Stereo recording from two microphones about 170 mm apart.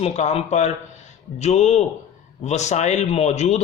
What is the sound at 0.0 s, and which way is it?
A man's voice, 40° left (ahead or behind).